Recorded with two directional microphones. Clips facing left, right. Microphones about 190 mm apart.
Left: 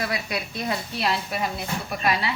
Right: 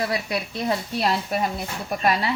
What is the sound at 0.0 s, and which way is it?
Speech, 30° right (ahead or behind).